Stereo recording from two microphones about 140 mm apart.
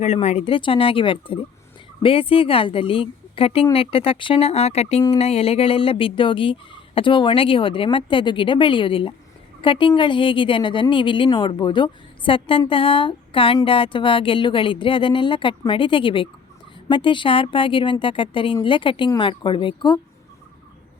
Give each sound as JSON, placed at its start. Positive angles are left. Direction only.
{"t": 0.0, "sound": "a woman's voice", "side_deg": 50}